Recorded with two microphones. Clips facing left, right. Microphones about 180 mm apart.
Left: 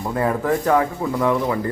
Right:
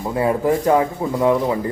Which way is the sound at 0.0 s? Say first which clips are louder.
Right 3 dB; 15° right (ahead or behind).